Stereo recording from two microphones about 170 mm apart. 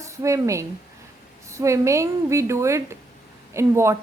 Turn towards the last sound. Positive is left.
turn(degrees=-15)  # may be behind; listen again after turning